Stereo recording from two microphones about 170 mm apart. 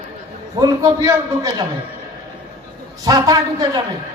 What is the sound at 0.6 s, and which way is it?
A man's voice, 20° right (ahead or behind).